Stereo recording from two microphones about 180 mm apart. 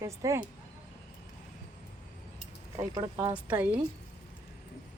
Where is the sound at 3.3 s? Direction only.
10° right (ahead or behind).